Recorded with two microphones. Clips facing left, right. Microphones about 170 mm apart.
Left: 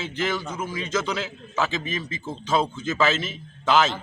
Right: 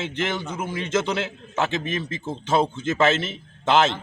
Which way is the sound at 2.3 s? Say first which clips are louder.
Right 2 dB; 25° right (ahead or behind).